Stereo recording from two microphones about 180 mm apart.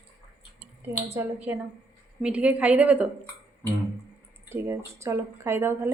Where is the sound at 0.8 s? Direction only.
15° right (ahead or behind).